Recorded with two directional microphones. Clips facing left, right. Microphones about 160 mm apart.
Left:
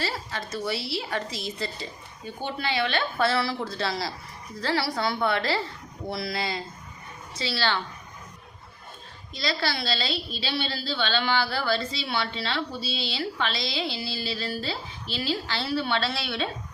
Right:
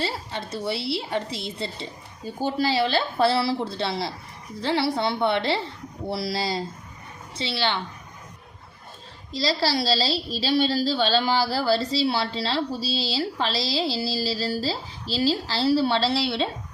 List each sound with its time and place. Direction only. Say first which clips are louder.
0.0 s a woman's voice: right 2 dB; 30° right (ahead or behind)
7.3 s a woman's voice: right 1 dB; 25° right (ahead or behind)
9.3 s a woman's voice: right 5 dB; 35° right (ahead or behind)